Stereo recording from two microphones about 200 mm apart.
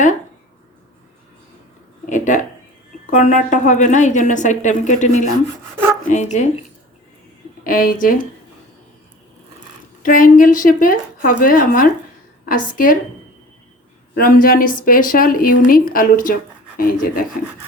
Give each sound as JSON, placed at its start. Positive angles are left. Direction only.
{"t": 2.0, "sound": "a sound", "side_deg": 40}
{"t": 3.1, "sound": "a woman's voice", "side_deg": 40}
{"t": 7.6, "sound": "a woman's voice", "side_deg": 45}
{"t": 10.0, "sound": "a woman's voice", "side_deg": 45}
{"t": 14.2, "sound": "a woman's voice", "side_deg": 45}